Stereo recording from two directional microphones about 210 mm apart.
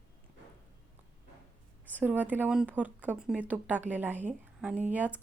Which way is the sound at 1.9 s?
10° right (ahead or behind).